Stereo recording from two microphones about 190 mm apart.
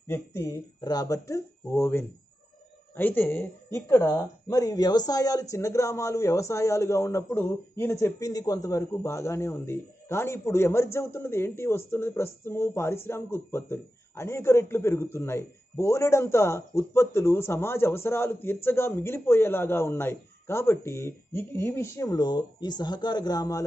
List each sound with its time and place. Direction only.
0.1 s speech: 15° left (ahead or behind)